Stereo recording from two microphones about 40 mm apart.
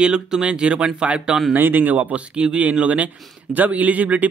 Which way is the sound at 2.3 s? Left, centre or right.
Right.